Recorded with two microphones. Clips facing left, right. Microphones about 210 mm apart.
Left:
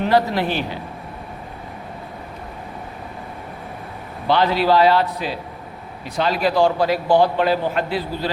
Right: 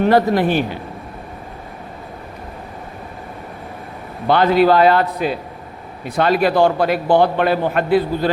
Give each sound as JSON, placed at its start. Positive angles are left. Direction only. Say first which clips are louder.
{"t": 0.0, "sound": "a man's voice", "louder": "right 4 dB", "side_deg": -50}
{"t": 4.3, "sound": "a man's voice", "louder": "right 4 dB", "side_deg": -50}